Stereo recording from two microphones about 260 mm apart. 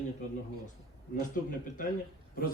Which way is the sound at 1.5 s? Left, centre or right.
Left.